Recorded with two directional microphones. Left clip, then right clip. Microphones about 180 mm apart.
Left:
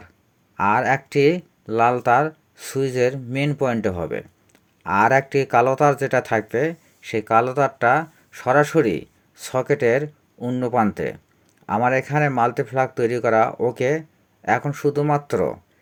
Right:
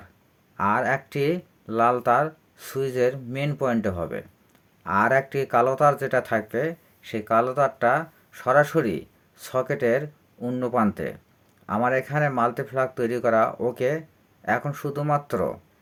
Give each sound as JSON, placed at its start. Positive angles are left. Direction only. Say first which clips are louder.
{"t": 0.5, "sound": "speech", "louder": "left 4 dB", "side_deg": 25}